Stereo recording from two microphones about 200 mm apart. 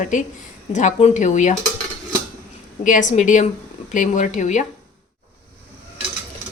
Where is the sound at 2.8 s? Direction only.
40° left (ahead or behind).